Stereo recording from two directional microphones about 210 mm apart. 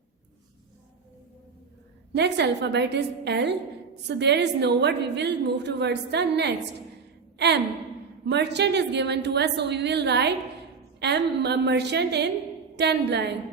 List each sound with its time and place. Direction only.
2.1 s a woman's voice: 55° right (ahead or behind)